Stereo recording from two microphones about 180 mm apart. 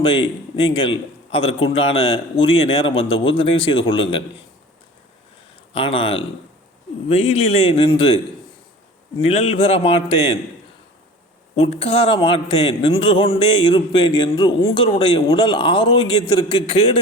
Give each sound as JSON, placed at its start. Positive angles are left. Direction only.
{"t": 0.0, "sound": "a man's voice", "side_deg": 30}
{"t": 5.7, "sound": "a man's voice", "side_deg": 30}
{"t": 9.2, "sound": "a man's voice", "side_deg": 35}
{"t": 11.5, "sound": "a man's voice", "side_deg": 35}